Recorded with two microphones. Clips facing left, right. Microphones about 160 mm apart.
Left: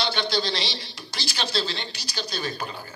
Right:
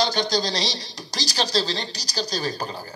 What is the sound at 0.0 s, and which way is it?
A man's voice, 40° right (ahead or behind).